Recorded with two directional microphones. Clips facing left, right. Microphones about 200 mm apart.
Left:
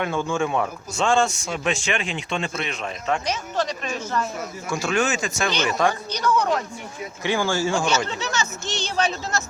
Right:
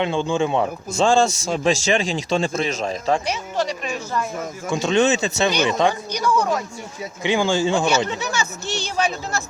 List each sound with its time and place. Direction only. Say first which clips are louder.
0.0 s a man's voice: right 3 dB; 30° right (ahead or behind)
3.2 s speech: right 2 dB; 10° right (ahead or behind)